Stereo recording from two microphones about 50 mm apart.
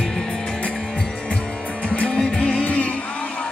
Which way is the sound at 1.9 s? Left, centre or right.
Centre.